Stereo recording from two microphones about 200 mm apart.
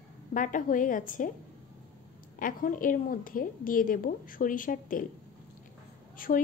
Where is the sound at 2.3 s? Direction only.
40° left (ahead or behind).